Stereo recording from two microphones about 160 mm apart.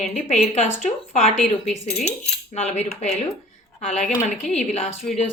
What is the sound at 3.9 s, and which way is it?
Speech, 5° left (ahead or behind).